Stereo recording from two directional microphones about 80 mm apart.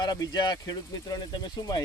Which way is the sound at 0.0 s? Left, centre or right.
Left.